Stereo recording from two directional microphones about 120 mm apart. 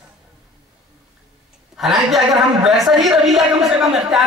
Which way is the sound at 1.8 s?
Centre (ahead or behind).